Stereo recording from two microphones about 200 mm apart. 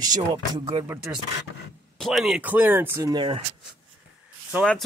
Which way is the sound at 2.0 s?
Centre (ahead or behind).